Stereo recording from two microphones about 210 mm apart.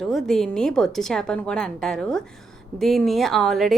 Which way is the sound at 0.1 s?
Centre (ahead or behind).